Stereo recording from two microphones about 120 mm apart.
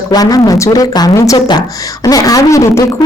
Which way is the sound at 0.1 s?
30° left (ahead or behind).